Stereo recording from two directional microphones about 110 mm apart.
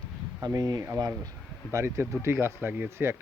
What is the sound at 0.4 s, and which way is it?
Speech, 35° right (ahead or behind).